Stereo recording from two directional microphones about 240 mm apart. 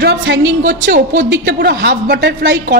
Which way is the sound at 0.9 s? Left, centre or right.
Right.